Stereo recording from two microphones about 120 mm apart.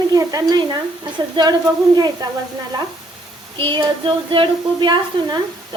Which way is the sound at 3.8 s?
45° right (ahead or behind).